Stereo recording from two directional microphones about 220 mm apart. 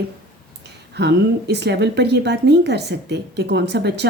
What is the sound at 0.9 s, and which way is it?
A woman's voice, 50° right (ahead or behind).